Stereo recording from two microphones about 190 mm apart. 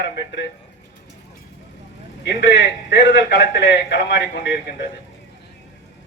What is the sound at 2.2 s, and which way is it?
A man's voice, 70° left (ahead or behind).